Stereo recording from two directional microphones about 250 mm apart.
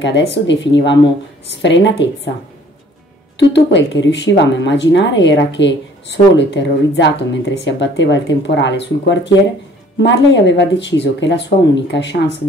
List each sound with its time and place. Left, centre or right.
0.0 s speech: left
3.3 s speech: left